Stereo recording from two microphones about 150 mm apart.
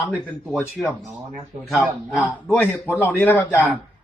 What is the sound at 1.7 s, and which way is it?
Speech, 10° right (ahead or behind).